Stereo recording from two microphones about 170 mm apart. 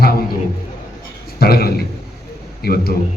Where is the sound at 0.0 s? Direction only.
65° left (ahead or behind).